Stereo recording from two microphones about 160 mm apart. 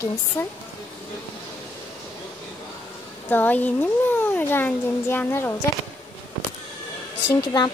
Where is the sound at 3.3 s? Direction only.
10° left (ahead or behind).